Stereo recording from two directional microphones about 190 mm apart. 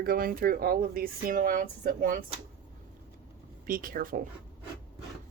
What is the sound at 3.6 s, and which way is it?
Speech, 50° right (ahead or behind).